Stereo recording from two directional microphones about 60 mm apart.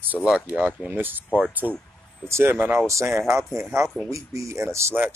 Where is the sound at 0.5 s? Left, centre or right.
Right.